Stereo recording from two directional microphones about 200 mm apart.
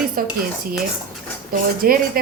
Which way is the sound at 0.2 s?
45° right (ahead or behind).